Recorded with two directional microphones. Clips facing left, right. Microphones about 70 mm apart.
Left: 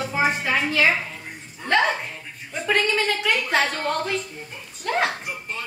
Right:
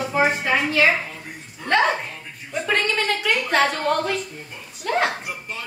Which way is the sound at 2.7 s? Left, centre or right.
Centre.